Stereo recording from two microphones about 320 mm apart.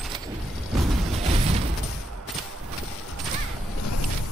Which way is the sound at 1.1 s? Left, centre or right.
Centre.